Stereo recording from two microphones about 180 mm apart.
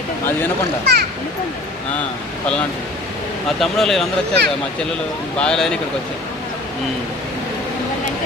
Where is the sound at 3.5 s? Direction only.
Centre (ahead or behind).